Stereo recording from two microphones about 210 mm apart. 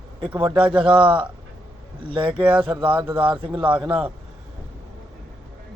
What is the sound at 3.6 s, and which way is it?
Speech, 5° right (ahead or behind).